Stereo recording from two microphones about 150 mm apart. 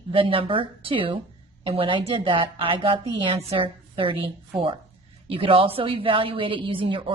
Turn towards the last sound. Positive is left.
turn(degrees=-35)  # may be behind; listen again after turning